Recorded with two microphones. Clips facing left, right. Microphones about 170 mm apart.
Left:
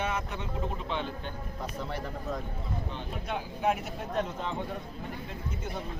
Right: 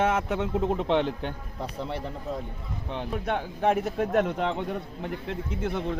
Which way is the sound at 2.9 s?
65° right (ahead or behind).